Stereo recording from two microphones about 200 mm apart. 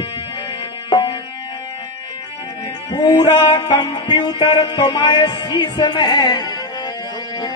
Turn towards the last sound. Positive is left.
turn(degrees=20)  # may be behind; listen again after turning